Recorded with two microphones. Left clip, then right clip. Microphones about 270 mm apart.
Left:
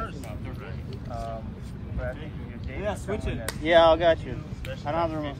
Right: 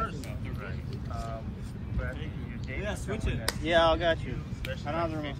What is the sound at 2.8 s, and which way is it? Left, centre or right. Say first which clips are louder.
Speech: left 6 dB; left.